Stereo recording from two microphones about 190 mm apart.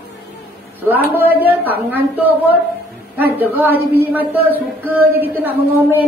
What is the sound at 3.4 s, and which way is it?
Speech, 10° right (ahead or behind).